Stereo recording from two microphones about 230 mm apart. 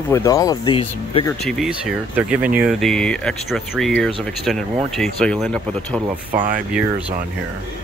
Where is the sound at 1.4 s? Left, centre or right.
Centre.